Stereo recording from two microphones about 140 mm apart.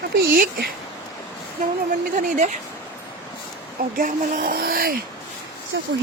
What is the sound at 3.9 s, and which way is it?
Speech, 70° right (ahead or behind).